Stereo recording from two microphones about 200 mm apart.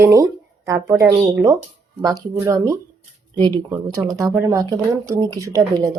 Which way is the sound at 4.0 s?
20° right (ahead or behind).